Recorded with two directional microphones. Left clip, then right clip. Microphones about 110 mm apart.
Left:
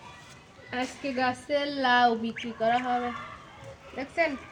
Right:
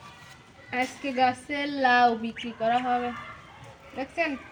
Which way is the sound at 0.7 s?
20° left (ahead or behind).